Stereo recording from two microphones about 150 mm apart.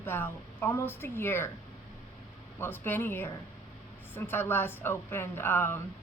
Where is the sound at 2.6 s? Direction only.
15° left (ahead or behind).